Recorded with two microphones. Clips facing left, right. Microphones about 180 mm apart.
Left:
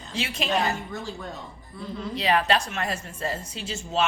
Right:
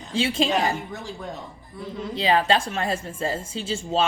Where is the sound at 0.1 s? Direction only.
30° right (ahead or behind).